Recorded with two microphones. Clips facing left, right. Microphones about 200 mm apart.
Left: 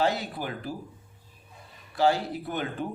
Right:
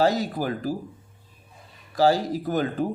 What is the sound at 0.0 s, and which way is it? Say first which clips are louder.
Speech: right 5 dB; 40° right (ahead or behind).